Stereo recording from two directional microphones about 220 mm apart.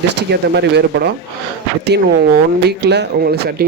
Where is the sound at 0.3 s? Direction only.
50° right (ahead or behind).